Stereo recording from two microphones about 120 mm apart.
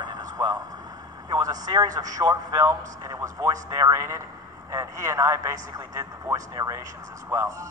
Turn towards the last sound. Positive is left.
turn(degrees=-25)  # may be behind; listen again after turning